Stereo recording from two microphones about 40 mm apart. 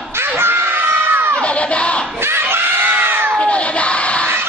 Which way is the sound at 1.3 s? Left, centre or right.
Left.